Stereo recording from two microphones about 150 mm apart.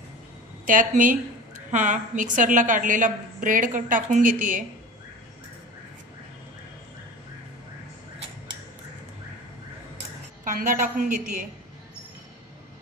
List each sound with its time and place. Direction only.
0.7 s a woman's voice: 60° right (ahead or behind)
10.4 s a woman's voice: 60° right (ahead or behind)